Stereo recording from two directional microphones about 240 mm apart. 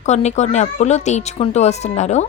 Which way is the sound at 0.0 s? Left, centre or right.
Left.